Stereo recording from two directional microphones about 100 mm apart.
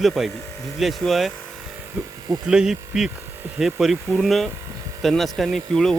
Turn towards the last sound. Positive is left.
turn(degrees=5)  # may be behind; listen again after turning